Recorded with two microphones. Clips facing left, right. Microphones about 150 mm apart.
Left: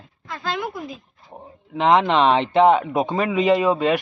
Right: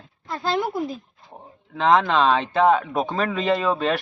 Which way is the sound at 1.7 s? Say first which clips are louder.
Left 2 dB; 20° left (ahead or behind).